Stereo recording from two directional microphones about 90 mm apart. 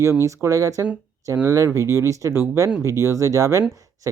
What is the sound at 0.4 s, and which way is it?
Speech, 40° right (ahead or behind).